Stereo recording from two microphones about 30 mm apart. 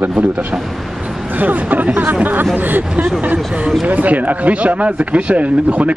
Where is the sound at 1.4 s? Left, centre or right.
Right.